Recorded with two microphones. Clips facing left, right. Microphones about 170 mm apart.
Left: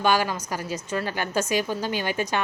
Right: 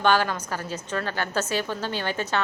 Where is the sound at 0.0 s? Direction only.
10° left (ahead or behind).